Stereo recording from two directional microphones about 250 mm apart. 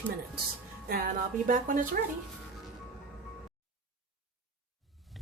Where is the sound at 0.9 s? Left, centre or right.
Right.